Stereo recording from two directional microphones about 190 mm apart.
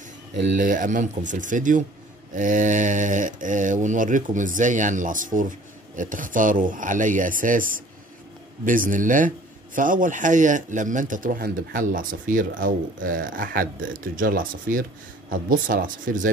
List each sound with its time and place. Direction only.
0.5 s speech: 45° right (ahead or behind)